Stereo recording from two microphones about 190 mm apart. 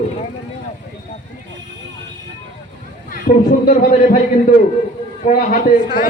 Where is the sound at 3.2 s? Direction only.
45° left (ahead or behind).